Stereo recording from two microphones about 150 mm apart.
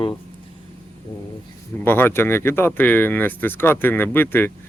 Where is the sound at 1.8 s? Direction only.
15° left (ahead or behind).